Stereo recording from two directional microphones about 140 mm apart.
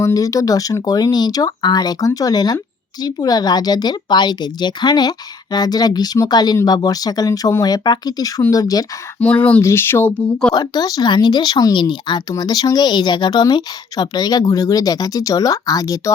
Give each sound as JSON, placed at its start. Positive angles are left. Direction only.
{"t": 0.0, "sound": "speech", "side_deg": 25}
{"t": 9.2, "sound": "speech", "side_deg": 10}
{"t": 10.5, "sound": "speech", "side_deg": 30}